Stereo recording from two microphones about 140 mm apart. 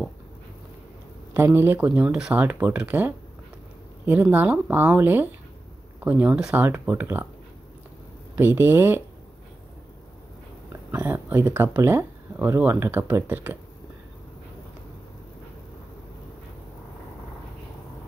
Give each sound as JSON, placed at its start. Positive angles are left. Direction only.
{"t": 1.3, "sound": "speech", "side_deg": -15}
{"t": 8.4, "sound": "speech", "side_deg": -15}
{"t": 10.9, "sound": "speech", "side_deg": -15}